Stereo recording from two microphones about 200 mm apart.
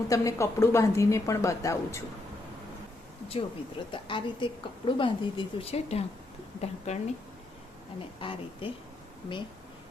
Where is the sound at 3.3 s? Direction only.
30° left (ahead or behind).